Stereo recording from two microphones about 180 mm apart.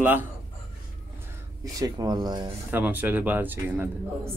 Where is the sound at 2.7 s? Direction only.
10° right (ahead or behind).